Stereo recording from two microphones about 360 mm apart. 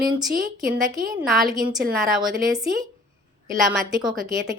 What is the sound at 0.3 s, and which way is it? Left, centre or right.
Speech, right.